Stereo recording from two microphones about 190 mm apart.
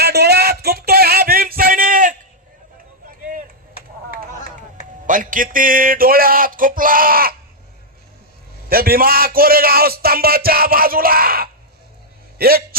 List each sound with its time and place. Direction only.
0.0 s music: 60° right (ahead or behind)
4.4 s a man's voice: 45° right (ahead or behind)
8.7 s a man's voice: 50° right (ahead or behind)